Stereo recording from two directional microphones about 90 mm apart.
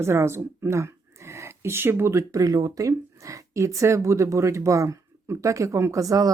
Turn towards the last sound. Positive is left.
turn(degrees=-40)  # may be behind; listen again after turning